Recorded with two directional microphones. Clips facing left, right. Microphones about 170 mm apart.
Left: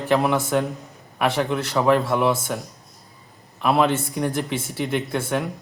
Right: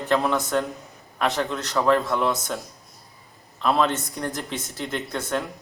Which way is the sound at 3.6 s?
10° left (ahead or behind).